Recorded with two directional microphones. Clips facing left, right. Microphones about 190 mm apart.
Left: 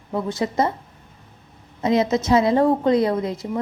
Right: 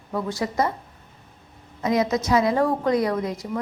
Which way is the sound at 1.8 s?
25° left (ahead or behind).